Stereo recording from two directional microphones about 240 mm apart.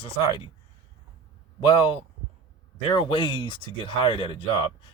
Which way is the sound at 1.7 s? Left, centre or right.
Left.